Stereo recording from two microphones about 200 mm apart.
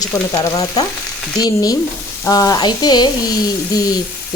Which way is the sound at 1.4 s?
20° left (ahead or behind).